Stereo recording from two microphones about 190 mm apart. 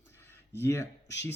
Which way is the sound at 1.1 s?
65° left (ahead or behind).